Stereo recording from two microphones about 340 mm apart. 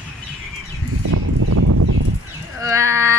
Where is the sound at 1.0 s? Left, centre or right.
Right.